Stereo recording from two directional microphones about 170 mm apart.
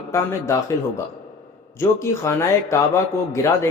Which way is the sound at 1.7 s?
15° left (ahead or behind).